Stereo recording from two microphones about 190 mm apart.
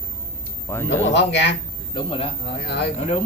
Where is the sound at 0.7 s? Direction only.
15° left (ahead or behind).